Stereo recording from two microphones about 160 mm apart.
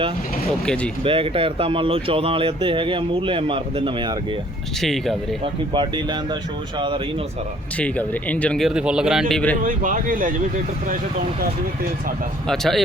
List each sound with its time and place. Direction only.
0.6 s speech: 5° left (ahead or behind)
1.0 s speech: 35° right (ahead or behind)
4.8 s speech: centre (ahead or behind)
5.4 s speech: 30° right (ahead or behind)
7.8 s speech: 10° left (ahead or behind)
9.6 s speech: 55° right (ahead or behind)
12.5 s speech: centre (ahead or behind)